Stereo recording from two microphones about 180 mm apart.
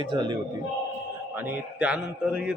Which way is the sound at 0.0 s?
25° right (ahead or behind).